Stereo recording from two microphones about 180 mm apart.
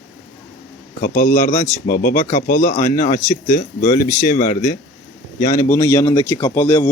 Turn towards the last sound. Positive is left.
turn(degrees=15)  # may be behind; listen again after turning